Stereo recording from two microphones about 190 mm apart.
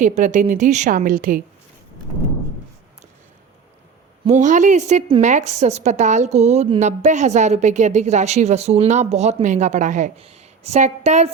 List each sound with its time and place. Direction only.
0.0 s a woman's voice: 40° right (ahead or behind)
4.3 s a woman's voice: 40° right (ahead or behind)